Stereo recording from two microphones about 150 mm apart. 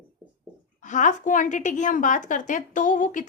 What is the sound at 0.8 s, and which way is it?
A woman's voice, 55° left (ahead or behind).